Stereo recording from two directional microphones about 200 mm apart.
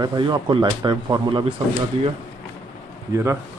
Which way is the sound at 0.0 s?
20° right (ahead or behind).